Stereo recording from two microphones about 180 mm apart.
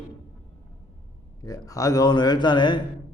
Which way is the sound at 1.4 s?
20° left (ahead or behind).